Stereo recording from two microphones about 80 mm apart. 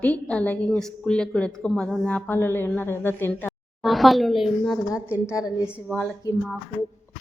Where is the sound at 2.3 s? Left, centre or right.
Left.